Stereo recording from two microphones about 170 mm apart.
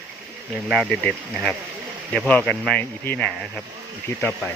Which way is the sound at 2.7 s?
10° left (ahead or behind).